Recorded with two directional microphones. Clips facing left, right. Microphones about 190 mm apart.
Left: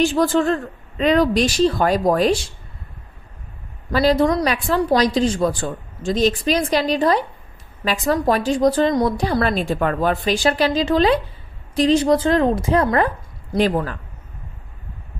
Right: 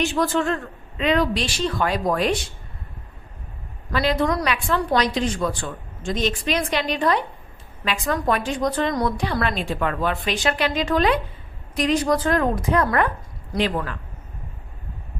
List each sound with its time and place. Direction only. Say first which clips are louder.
0.0 s a woman's voice: left 5 dB; 30° left (ahead or behind)
3.9 s a woman's voice: left 5 dB; 35° left (ahead or behind)
13.6 s a woman's voice: left 5 dB; 40° left (ahead or behind)